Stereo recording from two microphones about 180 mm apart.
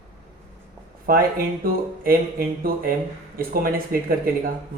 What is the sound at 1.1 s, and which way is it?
Speech, 55° right (ahead or behind).